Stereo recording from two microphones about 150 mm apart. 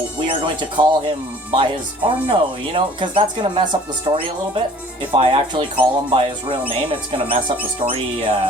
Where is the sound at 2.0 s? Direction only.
35° right (ahead or behind).